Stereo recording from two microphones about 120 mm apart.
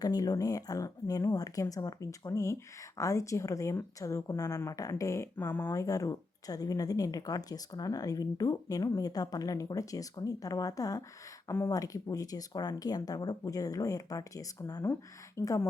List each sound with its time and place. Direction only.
0.0 s a woman's voice: 30° left (ahead or behind)